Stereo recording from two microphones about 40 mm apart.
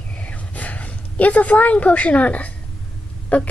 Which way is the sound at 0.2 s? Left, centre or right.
Left.